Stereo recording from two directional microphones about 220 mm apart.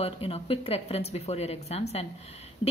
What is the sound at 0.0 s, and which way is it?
Speech, 25° left (ahead or behind).